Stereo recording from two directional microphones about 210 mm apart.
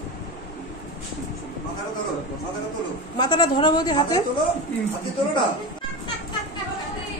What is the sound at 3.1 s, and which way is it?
A woman's voice, 20° left (ahead or behind).